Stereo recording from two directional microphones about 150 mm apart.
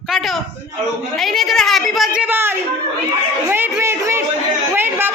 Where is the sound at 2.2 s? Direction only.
15° right (ahead or behind).